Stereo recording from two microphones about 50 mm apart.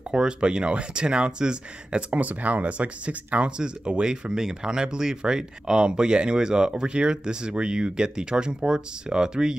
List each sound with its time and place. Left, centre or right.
0.1 s speech: centre